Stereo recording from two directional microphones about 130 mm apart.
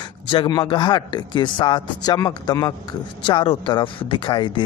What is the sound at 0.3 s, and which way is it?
Speech, 35° left (ahead or behind).